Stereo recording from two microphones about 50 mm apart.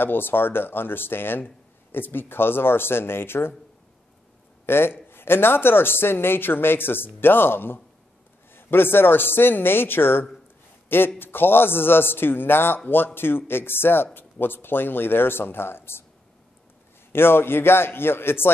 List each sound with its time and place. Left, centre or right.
0.0 s speech: left
4.6 s speech: left
17.1 s speech: left